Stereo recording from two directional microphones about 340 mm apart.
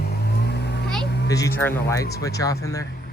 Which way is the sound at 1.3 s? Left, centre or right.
Centre.